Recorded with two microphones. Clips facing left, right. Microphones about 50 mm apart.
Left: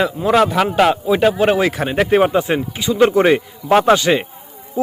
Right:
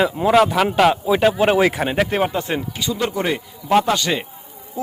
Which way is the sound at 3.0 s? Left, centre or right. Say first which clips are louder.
Left 10 dB; left.